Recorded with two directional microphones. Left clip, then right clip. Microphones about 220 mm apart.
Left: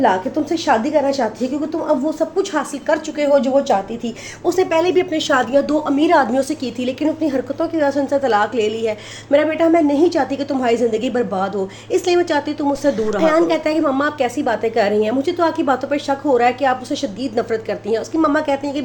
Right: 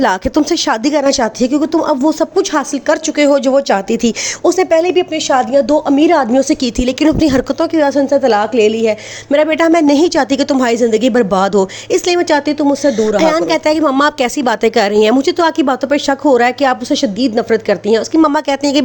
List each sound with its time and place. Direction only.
0.0 s speech: 50° right (ahead or behind)
4.4 s a woman's voice: 35° right (ahead or behind)
6.6 s a woman's voice: 40° right (ahead or behind)
9.3 s a woman's voice: 45° right (ahead or behind)